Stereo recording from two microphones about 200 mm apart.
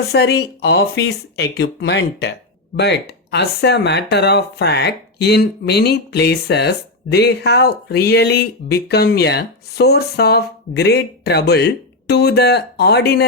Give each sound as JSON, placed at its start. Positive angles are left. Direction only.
{"t": 0.1, "sound": "speech", "side_deg": 55}